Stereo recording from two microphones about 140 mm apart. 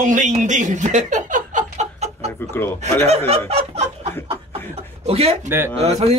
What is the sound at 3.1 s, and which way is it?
Snicker, 45° right (ahead or behind).